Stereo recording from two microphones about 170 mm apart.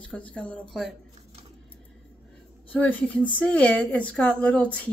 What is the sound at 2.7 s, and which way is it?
Speech, 10° left (ahead or behind).